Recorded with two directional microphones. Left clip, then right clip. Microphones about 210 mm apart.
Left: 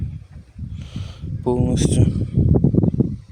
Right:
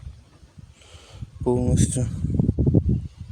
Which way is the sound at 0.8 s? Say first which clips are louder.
Left 6 dB; 5° left (ahead or behind).